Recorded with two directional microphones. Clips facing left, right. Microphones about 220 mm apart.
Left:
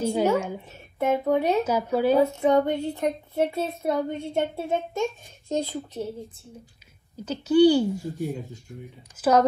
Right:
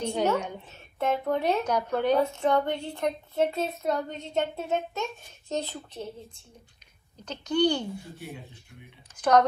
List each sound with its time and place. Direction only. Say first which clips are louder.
0.0 s speech: left 4 dB; 5° left (ahead or behind)
8.2 s speech: left 11 dB; 45° left (ahead or behind)
9.1 s speech: left 1 dB; 5° left (ahead or behind)